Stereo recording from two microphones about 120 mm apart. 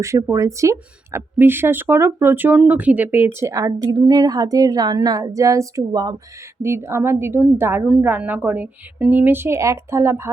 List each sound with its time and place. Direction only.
0.0 s a woman's voice: 25° right (ahead or behind)
3.5 s a woman's voice: 30° right (ahead or behind)
6.6 s a woman's voice: 20° right (ahead or behind)